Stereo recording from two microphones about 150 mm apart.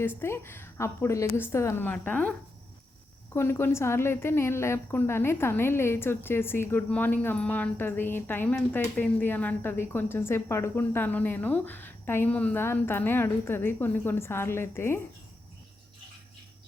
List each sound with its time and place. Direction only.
0.2 s a woman's voice: 15° left (ahead or behind)
3.3 s a woman's voice: 15° left (ahead or behind)